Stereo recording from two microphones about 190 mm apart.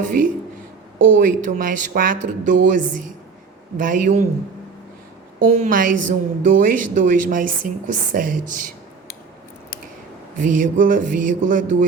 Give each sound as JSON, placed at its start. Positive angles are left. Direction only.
{"t": 1.1, "sound": "a woman's voice", "side_deg": -45}
{"t": 5.4, "sound": "a woman's voice", "side_deg": -45}
{"t": 10.3, "sound": "a woman's voice", "side_deg": -45}